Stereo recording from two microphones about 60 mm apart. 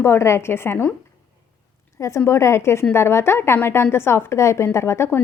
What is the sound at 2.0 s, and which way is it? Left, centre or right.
A woman's voice, left.